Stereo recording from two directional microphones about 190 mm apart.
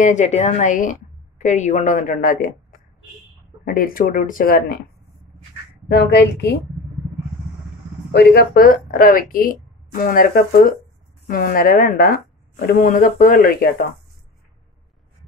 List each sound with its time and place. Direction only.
0.0 s a woman's voice: 40° left (ahead or behind)
3.6 s a woman's voice: 50° left (ahead or behind)
5.9 s a woman's voice: 60° left (ahead or behind)
8.1 s a woman's voice: 60° left (ahead or behind)